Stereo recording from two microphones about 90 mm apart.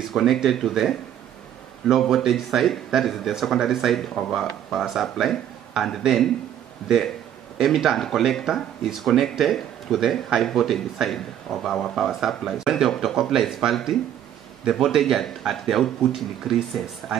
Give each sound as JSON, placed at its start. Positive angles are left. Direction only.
{"t": 0.0, "sound": "speech", "side_deg": 0}
{"t": 7.5, "sound": "speech", "side_deg": 0}